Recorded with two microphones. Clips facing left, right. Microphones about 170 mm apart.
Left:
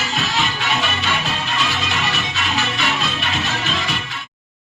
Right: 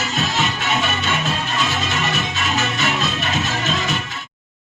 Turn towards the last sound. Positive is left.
turn(degrees=-45)  # may be behind; listen again after turning